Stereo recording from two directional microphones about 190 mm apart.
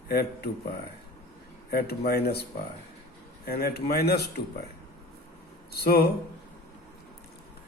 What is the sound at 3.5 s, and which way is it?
Speech, 55° left (ahead or behind).